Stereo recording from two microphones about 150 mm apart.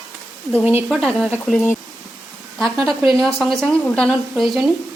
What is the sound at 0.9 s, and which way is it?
Speech, centre (ahead or behind).